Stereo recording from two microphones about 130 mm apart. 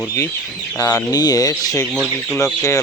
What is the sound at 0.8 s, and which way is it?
Speech, 25° left (ahead or behind).